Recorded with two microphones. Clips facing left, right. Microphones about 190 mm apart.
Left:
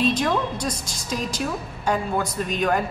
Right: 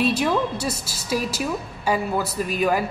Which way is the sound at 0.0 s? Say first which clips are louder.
Right 1 dB; 10° right (ahead or behind).